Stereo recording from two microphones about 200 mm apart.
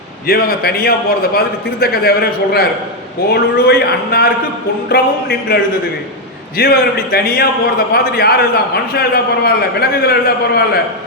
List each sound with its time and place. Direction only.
0.3 s a man's voice: 50° left (ahead or behind)
6.6 s a man's voice: 50° left (ahead or behind)